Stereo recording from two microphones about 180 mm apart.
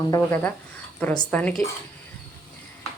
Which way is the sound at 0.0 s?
15° left (ahead or behind).